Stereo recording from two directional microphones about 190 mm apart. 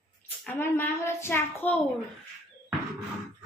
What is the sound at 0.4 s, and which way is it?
A child's voice, 10° left (ahead or behind).